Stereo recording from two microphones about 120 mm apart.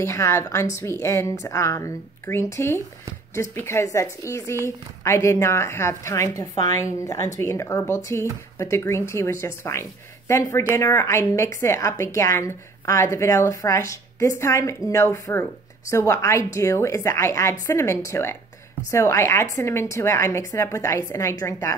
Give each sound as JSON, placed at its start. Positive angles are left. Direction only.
{"t": 0.0, "sound": "speech", "side_deg": 25}